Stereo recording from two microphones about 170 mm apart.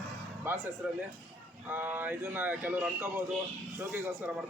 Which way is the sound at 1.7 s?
10° right (ahead or behind).